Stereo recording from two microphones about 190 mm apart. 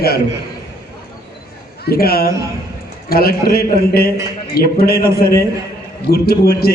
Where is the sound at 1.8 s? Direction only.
55° left (ahead or behind).